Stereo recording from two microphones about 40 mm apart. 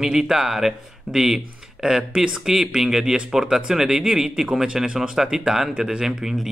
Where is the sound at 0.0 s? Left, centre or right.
Centre.